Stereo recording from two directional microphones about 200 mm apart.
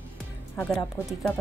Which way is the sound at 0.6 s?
5° left (ahead or behind).